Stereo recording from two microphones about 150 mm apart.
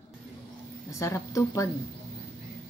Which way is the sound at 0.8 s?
20° left (ahead or behind).